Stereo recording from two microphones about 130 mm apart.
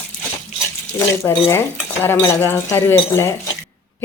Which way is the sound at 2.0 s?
15° left (ahead or behind).